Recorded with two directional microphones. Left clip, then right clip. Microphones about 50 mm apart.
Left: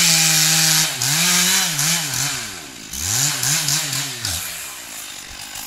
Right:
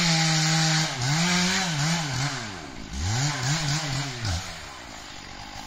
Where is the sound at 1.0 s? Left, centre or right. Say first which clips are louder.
Left 7 dB; right.